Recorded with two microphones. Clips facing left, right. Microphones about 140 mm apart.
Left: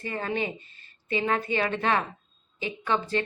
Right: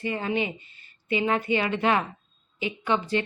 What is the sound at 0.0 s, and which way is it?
Speech, 15° right (ahead or behind).